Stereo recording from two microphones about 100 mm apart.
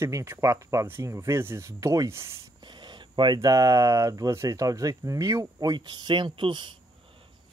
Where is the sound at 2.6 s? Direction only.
50° right (ahead or behind).